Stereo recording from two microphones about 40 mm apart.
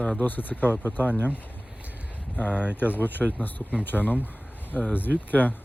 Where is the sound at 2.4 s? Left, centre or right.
Left.